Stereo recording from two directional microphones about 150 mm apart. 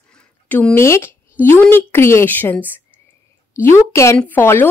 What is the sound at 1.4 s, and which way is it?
Speech, 15° left (ahead or behind).